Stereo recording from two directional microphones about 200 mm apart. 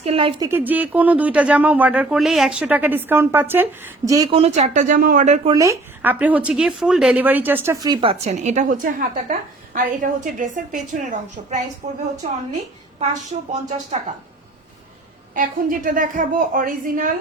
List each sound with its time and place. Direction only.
0.0 s speech: 30° right (ahead or behind)
0.4 s speech: 10° right (ahead or behind)
4.4 s a woman's voice: 35° right (ahead or behind)
5.5 s speech: 10° right (ahead or behind)
8.2 s a woman's voice: 35° right (ahead or behind)
13.5 s a woman's voice: 35° right (ahead or behind)
15.4 s a woman's voice: 40° right (ahead or behind)